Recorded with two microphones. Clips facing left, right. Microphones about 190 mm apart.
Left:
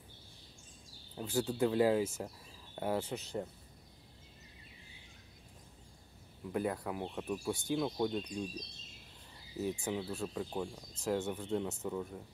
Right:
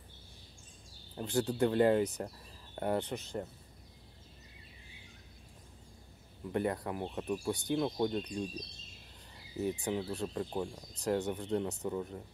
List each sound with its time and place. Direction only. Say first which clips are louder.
1.1 s speech: right 2 dB; centre (ahead or behind)
6.5 s speech: right 2 dB; centre (ahead or behind)
9.6 s speech: right 2 dB; centre (ahead or behind)